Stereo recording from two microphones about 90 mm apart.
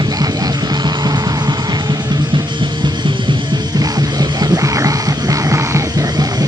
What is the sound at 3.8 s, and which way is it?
Music, 45° right (ahead or behind).